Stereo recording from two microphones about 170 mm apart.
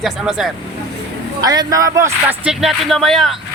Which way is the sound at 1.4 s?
25° right (ahead or behind).